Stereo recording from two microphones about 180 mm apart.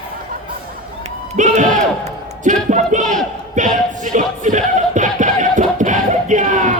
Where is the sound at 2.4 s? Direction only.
45° right (ahead or behind).